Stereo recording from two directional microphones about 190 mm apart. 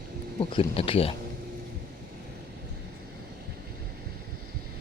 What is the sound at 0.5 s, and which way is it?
Speech, 30° left (ahead or behind).